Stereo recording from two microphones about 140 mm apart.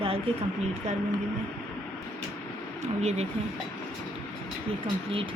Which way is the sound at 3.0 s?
50° right (ahead or behind).